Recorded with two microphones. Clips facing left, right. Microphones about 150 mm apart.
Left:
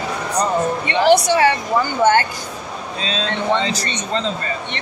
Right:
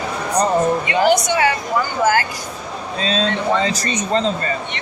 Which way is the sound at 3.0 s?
40° right (ahead or behind).